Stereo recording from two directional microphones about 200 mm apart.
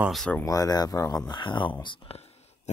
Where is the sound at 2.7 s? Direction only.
35° left (ahead or behind).